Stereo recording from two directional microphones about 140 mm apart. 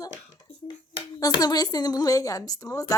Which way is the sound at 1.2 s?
30° left (ahead or behind).